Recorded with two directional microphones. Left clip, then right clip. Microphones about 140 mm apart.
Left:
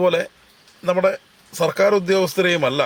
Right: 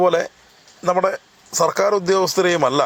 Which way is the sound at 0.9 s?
25° left (ahead or behind).